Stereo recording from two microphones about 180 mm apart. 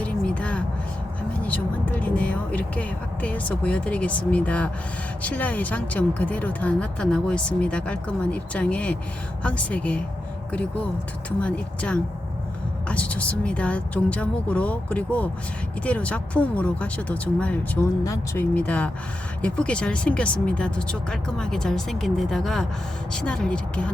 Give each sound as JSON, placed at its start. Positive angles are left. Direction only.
{"t": 0.0, "sound": "a sound", "side_deg": 5}
{"t": 1.5, "sound": "speech", "side_deg": 10}
{"t": 18.0, "sound": "speech", "side_deg": 20}